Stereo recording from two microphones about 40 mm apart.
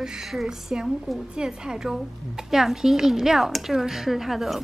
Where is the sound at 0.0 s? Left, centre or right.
Centre.